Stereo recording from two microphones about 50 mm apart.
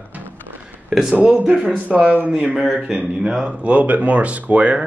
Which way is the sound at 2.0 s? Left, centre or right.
Right.